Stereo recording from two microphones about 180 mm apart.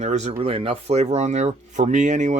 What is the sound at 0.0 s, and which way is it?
Speech, 40° right (ahead or behind).